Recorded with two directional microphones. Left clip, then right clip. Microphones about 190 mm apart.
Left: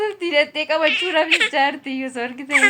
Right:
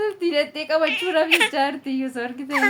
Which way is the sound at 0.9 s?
30° right (ahead or behind).